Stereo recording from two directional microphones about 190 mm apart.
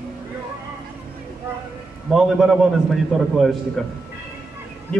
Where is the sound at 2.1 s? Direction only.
Centre (ahead or behind).